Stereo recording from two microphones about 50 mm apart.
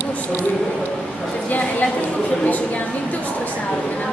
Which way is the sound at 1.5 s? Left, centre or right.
Left.